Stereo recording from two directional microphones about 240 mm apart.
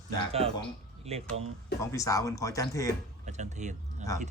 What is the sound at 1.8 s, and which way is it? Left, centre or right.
Speech, centre.